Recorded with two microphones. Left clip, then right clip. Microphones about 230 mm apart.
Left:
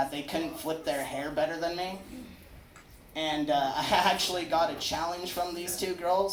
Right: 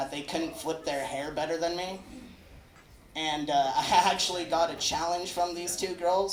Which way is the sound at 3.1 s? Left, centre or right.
Right.